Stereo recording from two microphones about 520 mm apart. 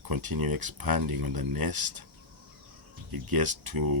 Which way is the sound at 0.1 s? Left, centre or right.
Right.